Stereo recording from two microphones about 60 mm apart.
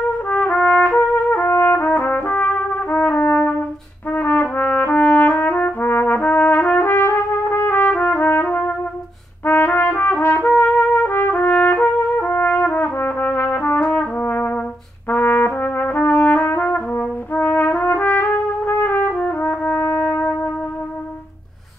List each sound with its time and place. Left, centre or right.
0.3 s trumpet: left
15.0 s brass instrument: left